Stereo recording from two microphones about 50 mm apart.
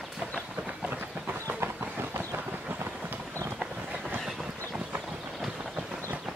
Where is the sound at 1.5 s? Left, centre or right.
Right.